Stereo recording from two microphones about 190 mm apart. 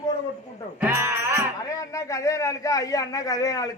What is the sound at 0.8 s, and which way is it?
Music, 15° right (ahead or behind).